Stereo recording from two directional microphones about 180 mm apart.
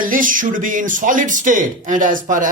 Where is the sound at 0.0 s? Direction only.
50° right (ahead or behind).